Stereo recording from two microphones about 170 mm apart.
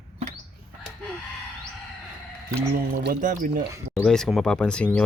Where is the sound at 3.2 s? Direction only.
50° right (ahead or behind).